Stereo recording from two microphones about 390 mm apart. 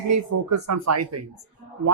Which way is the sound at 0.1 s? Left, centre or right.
Right.